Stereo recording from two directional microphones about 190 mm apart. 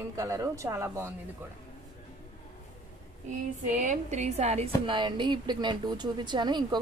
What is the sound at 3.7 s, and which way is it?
A woman's voice, 40° right (ahead or behind).